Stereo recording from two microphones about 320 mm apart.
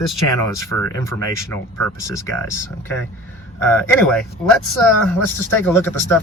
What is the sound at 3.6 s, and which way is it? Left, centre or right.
Speech, centre.